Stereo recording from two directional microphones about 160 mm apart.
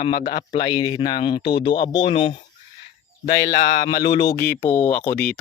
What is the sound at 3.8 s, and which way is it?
Speech, 25° left (ahead or behind).